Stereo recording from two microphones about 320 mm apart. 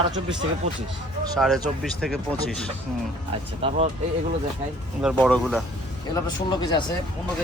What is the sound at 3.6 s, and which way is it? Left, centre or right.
Speech, centre.